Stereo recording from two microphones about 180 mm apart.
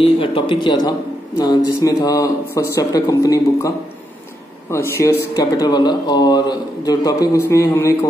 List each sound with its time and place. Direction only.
0.0 s speech: 30° left (ahead or behind)